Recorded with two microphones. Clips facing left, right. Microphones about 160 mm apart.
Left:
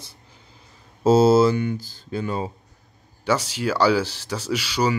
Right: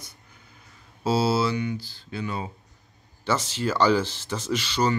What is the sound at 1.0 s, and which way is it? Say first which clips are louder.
Speech: left 8 dB; 45° left (ahead or behind).